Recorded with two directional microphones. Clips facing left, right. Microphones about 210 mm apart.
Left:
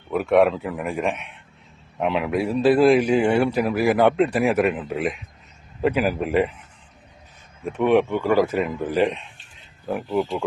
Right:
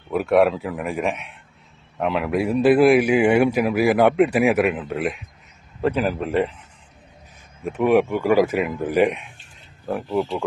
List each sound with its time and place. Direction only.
0.1 s a man's voice: centre (ahead or behind)
2.5 s a man's voice: 15° right (ahead or behind); by 6.5 s 5° left (ahead or behind)
7.6 s a man's voice: 5° right (ahead or behind)
10.1 s speech: 10° left (ahead or behind)